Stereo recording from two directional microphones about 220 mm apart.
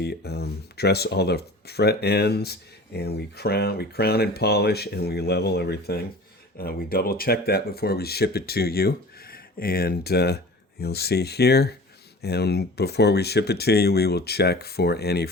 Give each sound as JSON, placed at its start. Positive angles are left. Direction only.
{"t": 0.0, "sound": "speech", "side_deg": 45}